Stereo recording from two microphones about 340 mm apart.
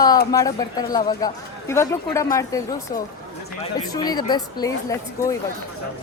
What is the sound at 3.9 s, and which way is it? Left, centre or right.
Speech, centre.